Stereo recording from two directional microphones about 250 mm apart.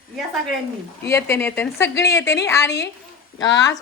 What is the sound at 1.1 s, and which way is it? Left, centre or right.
A woman's voice, centre.